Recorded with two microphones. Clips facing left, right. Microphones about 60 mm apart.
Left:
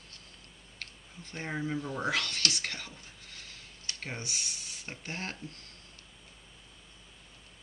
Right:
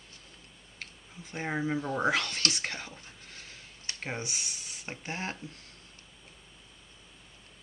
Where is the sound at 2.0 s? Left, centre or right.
Right.